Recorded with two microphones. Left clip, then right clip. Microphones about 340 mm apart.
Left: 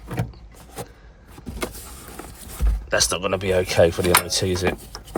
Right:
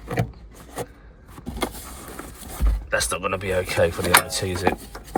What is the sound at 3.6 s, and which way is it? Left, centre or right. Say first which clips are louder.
Speech: left 5 dB; centre.